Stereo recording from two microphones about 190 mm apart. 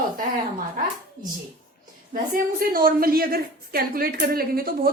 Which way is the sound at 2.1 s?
50° right (ahead or behind).